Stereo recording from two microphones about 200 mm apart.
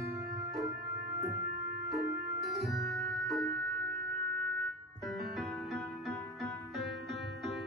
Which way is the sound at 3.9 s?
55° right (ahead or behind).